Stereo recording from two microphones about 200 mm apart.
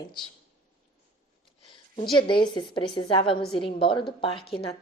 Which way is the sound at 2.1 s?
25° left (ahead or behind).